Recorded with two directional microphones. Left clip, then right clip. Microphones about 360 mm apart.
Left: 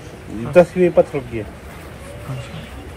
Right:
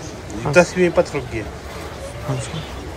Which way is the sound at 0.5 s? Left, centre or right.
Centre.